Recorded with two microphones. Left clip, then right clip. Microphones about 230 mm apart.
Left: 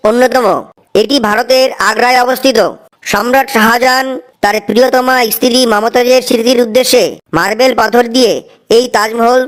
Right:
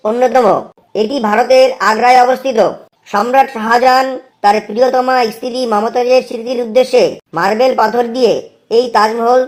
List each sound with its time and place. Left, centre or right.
0.0 s a woman's voice: left